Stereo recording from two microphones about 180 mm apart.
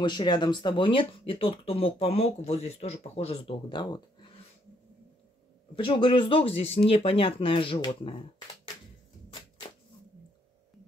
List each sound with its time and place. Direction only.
0.0 s speech: 25° left (ahead or behind)
5.8 s speech: 30° left (ahead or behind)